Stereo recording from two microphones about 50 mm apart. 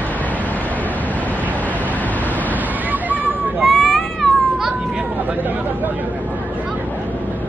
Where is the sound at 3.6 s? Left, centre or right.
Centre.